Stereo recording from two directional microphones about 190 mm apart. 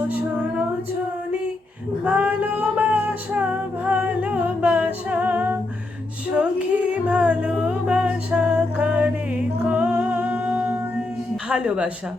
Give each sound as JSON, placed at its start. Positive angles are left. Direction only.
{"t": 2.0, "sound": "music", "side_deg": -5}
{"t": 9.6, "sound": "humming", "side_deg": -5}
{"t": 11.4, "sound": "speech", "side_deg": -5}